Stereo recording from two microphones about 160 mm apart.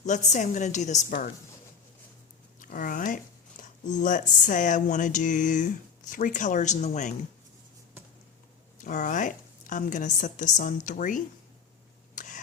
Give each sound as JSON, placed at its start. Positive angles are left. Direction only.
{"t": 0.0, "sound": "speech", "side_deg": 45}
{"t": 2.6, "sound": "speech", "side_deg": 55}
{"t": 8.8, "sound": "speech", "side_deg": 50}
{"t": 12.1, "sound": "a sound", "side_deg": 55}